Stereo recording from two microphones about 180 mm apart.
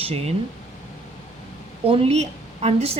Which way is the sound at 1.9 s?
35° right (ahead or behind).